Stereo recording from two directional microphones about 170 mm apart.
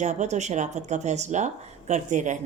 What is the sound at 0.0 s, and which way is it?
A woman's voice, 45° right (ahead or behind).